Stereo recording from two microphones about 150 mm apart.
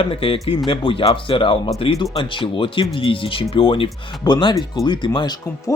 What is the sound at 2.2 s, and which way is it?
Speech, 35° left (ahead or behind).